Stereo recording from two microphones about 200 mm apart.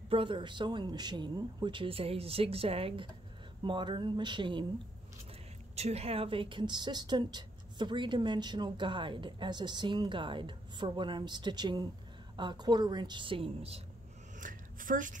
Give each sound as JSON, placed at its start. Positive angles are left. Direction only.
{"t": 0.1, "sound": "speech", "side_deg": -25}
{"t": 5.8, "sound": "speech", "side_deg": -30}
{"t": 14.4, "sound": "a sound", "side_deg": -40}